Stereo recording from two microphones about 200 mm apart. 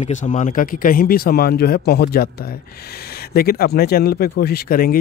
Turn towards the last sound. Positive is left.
turn(degrees=50)  # may be behind; listen again after turning